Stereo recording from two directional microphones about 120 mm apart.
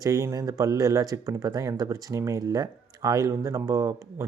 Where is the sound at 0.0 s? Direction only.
25° right (ahead or behind).